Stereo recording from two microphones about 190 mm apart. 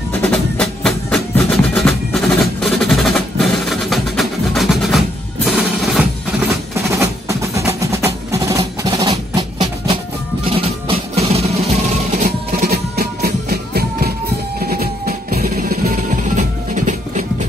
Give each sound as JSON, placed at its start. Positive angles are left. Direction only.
{"t": 0.1, "sound": "music", "side_deg": 5}
{"t": 5.9, "sound": "music", "side_deg": -10}
{"t": 12.3, "sound": "music", "side_deg": -50}